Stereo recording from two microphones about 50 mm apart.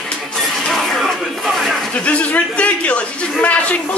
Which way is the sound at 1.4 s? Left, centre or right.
Centre.